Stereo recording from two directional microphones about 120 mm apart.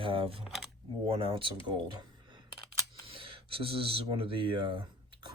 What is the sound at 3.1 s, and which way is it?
Speech, 45° right (ahead or behind).